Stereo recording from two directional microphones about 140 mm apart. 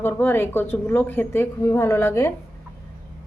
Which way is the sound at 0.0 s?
15° left (ahead or behind).